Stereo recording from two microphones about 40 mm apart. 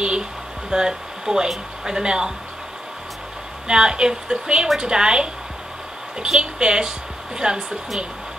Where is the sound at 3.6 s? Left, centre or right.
Centre.